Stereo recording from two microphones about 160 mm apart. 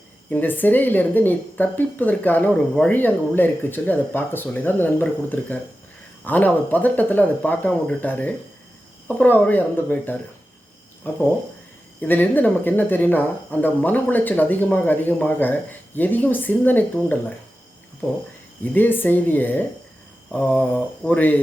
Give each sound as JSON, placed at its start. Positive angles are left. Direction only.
{"t": 0.3, "sound": "speech", "side_deg": 10}
{"t": 18.6, "sound": "speech", "side_deg": 10}